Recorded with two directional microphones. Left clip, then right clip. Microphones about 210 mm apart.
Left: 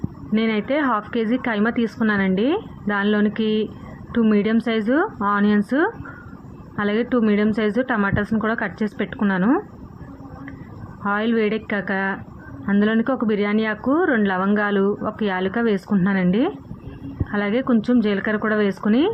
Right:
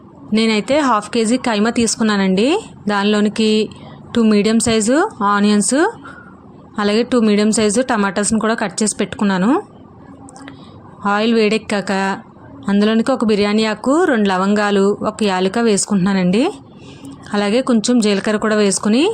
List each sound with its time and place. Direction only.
0.3 s speech: 55° right (ahead or behind)
11.0 s speech: 50° right (ahead or behind)